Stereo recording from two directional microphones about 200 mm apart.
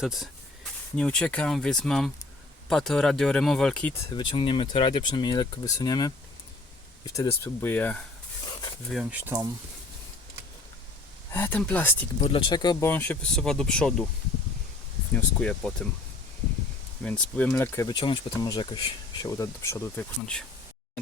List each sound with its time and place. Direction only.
0.0 s speech: centre (ahead or behind)
4.1 s speech: 25° left (ahead or behind); by 8.0 s 5° left (ahead or behind)
8.9 s speech: 5° right (ahead or behind)
11.3 s speech: 10° left (ahead or behind)
12.2 s speech: 25° left (ahead or behind)
12.9 s speech: 10° left (ahead or behind)
15.1 s speech: 5° left (ahead or behind)
17.0 s speech: 5° left (ahead or behind)